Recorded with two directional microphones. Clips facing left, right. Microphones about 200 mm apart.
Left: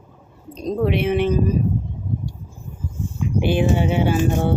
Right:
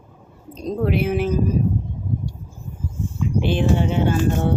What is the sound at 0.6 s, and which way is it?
Speech, centre (ahead or behind).